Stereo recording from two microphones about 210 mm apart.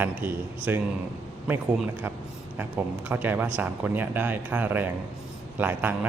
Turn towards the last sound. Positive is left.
turn(degrees=-10)  # may be behind; listen again after turning